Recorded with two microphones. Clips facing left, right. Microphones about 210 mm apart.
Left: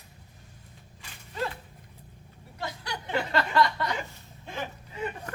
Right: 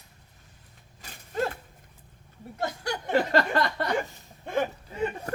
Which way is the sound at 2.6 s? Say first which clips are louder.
Right 5 dB; 45° right (ahead or behind).